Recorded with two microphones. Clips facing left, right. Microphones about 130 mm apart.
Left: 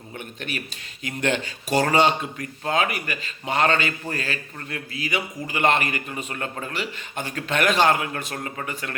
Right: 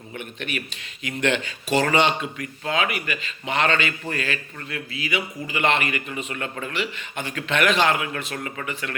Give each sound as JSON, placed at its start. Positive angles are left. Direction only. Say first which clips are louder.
{"t": 1.0, "sound": "a man's voice", "louder": "right 1 dB", "side_deg": 40}